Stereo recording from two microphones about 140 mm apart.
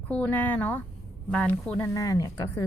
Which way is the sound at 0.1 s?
10° left (ahead or behind).